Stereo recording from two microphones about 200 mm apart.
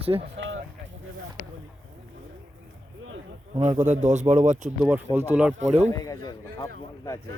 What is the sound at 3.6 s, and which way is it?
Speech, 40° right (ahead or behind).